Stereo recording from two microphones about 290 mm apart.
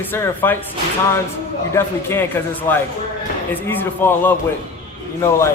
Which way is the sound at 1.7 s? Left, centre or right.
Centre.